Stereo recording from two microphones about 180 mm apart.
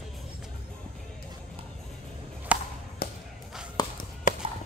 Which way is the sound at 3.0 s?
55° left (ahead or behind).